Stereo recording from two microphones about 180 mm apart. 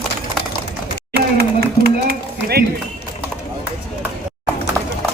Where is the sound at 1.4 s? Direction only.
60° right (ahead or behind).